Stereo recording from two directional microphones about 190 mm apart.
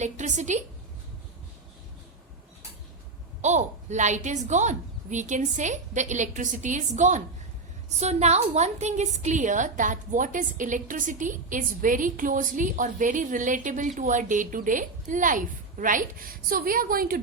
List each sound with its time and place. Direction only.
0.0 s a woman's voice: 40° right (ahead or behind)
3.4 s a woman's voice: 40° right (ahead or behind)